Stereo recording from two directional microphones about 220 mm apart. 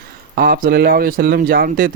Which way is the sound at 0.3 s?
40° right (ahead or behind).